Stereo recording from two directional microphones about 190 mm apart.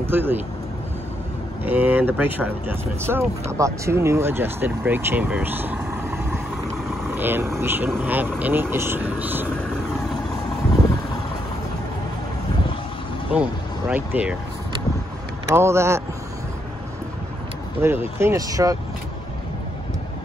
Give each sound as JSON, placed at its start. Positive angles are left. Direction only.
{"t": 0.0, "sound": "speech", "side_deg": -10}
{"t": 1.6, "sound": "speech", "side_deg": -10}
{"t": 13.3, "sound": "speech", "side_deg": -5}
{"t": 15.5, "sound": "speech", "side_deg": -15}
{"t": 17.8, "sound": "speech", "side_deg": -15}